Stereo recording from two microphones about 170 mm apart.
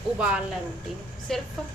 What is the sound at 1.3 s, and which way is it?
Speech, centre (ahead or behind).